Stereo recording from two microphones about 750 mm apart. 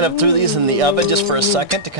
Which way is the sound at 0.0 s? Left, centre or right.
Right.